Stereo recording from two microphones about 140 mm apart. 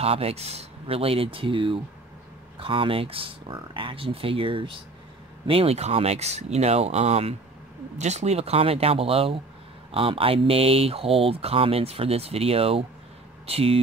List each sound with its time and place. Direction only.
0.0 s speech: 45° right (ahead or behind)